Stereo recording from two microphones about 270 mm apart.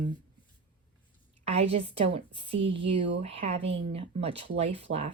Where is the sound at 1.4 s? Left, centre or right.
Right.